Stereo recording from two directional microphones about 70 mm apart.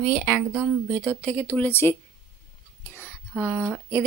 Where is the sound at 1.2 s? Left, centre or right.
Left.